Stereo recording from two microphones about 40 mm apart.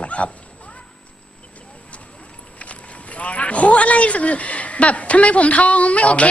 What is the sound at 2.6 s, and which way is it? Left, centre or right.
Speech, left.